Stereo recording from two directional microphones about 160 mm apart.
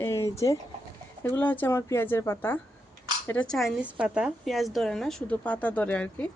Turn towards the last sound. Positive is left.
turn(degrees=10)  # may be behind; listen again after turning